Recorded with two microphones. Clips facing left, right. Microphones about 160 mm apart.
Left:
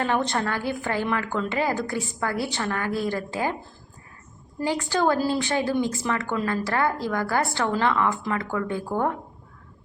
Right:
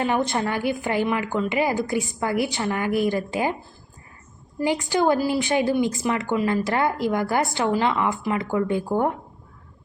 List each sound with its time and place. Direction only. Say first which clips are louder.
0.0 s a woman's voice: right 2 dB; 10° right (ahead or behind)
4.6 s a woman's voice: right 2 dB; 15° right (ahead or behind)